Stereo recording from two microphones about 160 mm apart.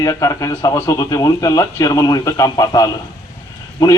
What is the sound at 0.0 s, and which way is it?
A man's voice, 20° left (ahead or behind).